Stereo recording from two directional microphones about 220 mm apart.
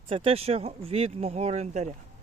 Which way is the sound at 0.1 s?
25° right (ahead or behind).